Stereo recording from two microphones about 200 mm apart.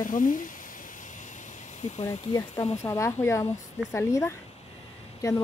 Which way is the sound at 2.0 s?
20° left (ahead or behind).